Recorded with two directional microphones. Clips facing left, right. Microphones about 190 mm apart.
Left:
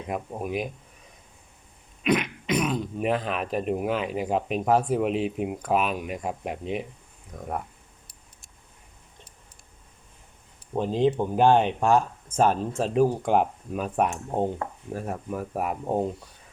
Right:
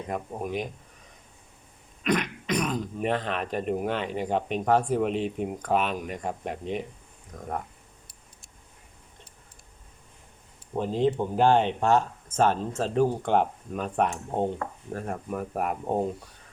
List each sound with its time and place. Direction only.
0.1 s speech: 10° left (ahead or behind)
2.0 s speech: 5° left (ahead or behind)
10.8 s speech: 15° left (ahead or behind); by 16.0 s centre (ahead or behind)